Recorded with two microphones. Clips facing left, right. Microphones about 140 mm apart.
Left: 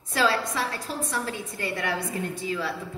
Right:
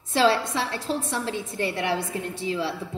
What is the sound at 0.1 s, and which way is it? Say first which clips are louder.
A woman's voice: right 4 dB; 25° right (ahead or behind).